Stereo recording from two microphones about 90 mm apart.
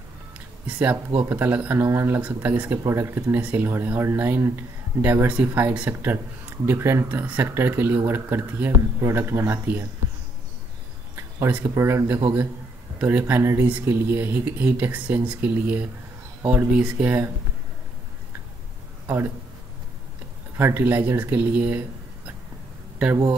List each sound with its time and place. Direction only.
0.7 s speech: 15° right (ahead or behind)
1.9 s speech: 30° right (ahead or behind)
2.9 s speech: 30° right (ahead or behind)
11.1 s a sound: 30° right (ahead or behind)
11.7 s speech: 30° right (ahead or behind)
13.0 s speech: 20° right (ahead or behind)
13.4 s speech: 30° right (ahead or behind)
13.7 s speech: 20° right (ahead or behind)
19.0 s speech: 25° right (ahead or behind)
20.5 s speech: 25° right (ahead or behind)